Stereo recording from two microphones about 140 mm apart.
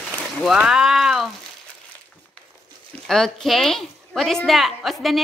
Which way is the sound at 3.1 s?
5° left (ahead or behind).